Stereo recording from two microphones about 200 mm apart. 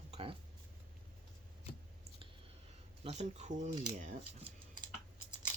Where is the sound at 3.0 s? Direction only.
35° right (ahead or behind).